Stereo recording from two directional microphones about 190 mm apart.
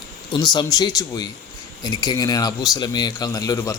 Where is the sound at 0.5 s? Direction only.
20° left (ahead or behind).